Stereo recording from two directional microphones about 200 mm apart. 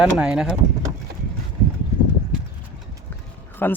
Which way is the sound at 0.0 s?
5° right (ahead or behind).